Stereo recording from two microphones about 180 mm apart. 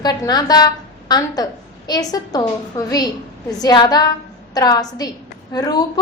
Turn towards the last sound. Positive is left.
turn(degrees=20)  # may be behind; listen again after turning